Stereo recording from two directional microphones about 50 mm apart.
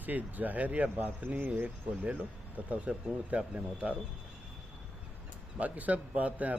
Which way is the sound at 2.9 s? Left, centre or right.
Centre.